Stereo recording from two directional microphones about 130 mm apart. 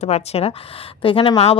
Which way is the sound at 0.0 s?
55° left (ahead or behind).